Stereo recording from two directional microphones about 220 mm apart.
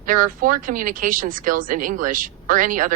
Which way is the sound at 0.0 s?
40° right (ahead or behind).